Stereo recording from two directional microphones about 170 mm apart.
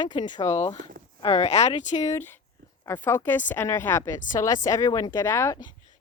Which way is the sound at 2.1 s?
10° left (ahead or behind).